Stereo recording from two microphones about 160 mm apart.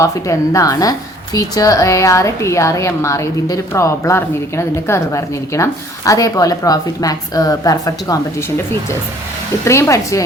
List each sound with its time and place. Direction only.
0.0 s a woman's voice: 20° left (ahead or behind)
9.6 s a woman's voice: 20° left (ahead or behind)